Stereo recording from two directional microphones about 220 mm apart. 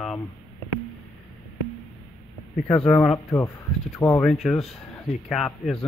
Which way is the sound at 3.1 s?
15° left (ahead or behind).